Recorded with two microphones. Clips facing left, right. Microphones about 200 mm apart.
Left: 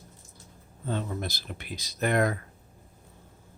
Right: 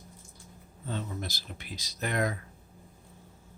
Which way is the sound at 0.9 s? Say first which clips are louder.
Left 4 dB; 55° left (ahead or behind).